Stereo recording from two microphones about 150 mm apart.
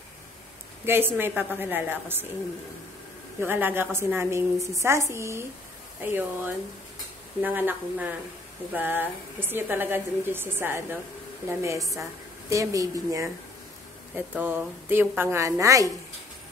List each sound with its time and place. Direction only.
0.8 s a woman's voice: 15° right (ahead or behind)
3.3 s a woman's voice: 15° right (ahead or behind)
14.1 s a woman's voice: 10° right (ahead or behind)